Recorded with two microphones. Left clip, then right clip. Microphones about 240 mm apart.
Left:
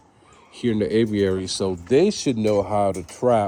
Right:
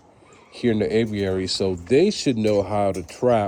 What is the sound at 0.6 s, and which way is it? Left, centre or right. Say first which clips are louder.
Speech: even; centre.